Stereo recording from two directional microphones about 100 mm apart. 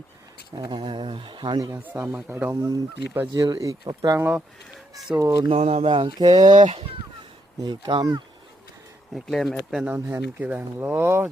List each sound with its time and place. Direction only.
0.5 s speech: 45° right (ahead or behind)
1.7 s speech: 20° right (ahead or behind)
2.5 s speech: 35° right (ahead or behind)
4.2 s speech: 15° right (ahead or behind)
5.5 s speech: 90° right
6.1 s speech: 40° right (ahead or behind)
9.1 s speech: centre (ahead or behind)
9.8 s speech: 15° right (ahead or behind)